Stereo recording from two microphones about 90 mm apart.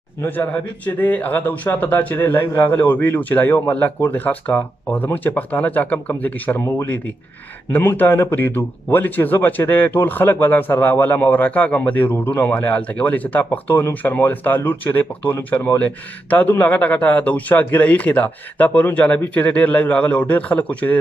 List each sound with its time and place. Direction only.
0.2 s a man's voice: 20° left (ahead or behind)